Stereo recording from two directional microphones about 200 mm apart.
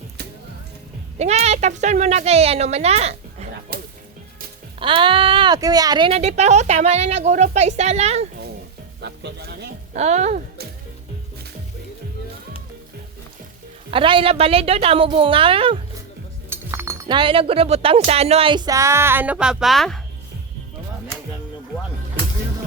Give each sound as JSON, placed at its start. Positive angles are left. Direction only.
{"t": 1.2, "sound": "speech", "side_deg": -35}
{"t": 4.8, "sound": "speech", "side_deg": -25}
{"t": 9.0, "sound": "music", "side_deg": -55}
{"t": 9.9, "sound": "speech", "side_deg": -35}
{"t": 13.9, "sound": "a woman's voice", "side_deg": -25}
{"t": 16.5, "sound": "speech", "side_deg": -15}